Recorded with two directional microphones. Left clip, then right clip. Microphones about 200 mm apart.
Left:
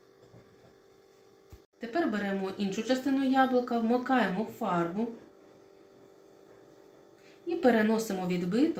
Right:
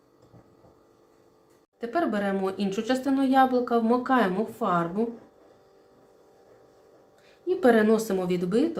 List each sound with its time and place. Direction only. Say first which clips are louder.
1.8 s speech: right 5 dB; 35° right (ahead or behind)
7.4 s speech: right 5 dB; 40° right (ahead or behind)